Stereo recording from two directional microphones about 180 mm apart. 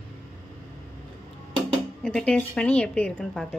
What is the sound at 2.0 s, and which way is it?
A woman's voice, 5° left (ahead or behind).